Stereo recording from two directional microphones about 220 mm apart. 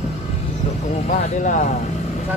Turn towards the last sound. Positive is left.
turn(degrees=35)  # may be behind; listen again after turning